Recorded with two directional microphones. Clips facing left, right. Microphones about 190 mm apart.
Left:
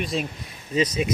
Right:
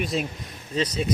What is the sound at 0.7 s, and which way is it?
Speech, 10° left (ahead or behind).